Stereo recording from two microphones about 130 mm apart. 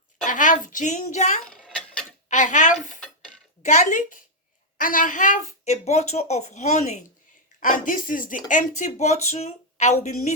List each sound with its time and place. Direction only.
0.3 s speech: 85° left; by 1.4 s 70° left (ahead or behind)
1.5 s mechanisms: 5° left (ahead or behind)
2.3 s speech: 70° left (ahead or behind)
4.8 s speech: 90° left; by 7.0 s 65° left (ahead or behind)
7.6 s speech: 90° left; by 10.3 s 60° left (ahead or behind)